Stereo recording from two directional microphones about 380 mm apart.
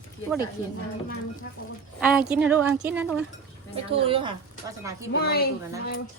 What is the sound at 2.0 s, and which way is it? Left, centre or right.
Speech, centre.